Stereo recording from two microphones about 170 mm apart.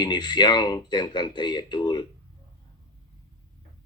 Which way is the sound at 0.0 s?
25° left (ahead or behind).